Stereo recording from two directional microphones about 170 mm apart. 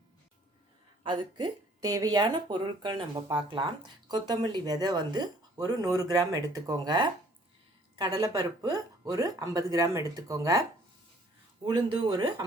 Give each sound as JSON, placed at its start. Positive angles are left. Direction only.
{"t": 1.0, "sound": "speech", "side_deg": -25}
{"t": 11.6, "sound": "speech", "side_deg": -25}